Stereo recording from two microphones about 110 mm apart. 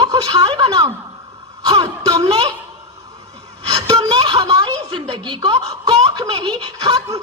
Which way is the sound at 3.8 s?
35° right (ahead or behind).